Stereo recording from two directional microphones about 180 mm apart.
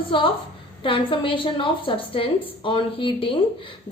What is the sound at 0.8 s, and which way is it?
A woman's voice, 30° left (ahead or behind).